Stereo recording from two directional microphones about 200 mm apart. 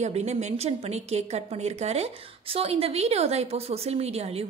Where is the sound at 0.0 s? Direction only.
35° right (ahead or behind).